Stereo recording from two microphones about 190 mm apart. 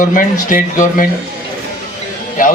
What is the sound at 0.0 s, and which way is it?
A man's voice, 45° left (ahead or behind).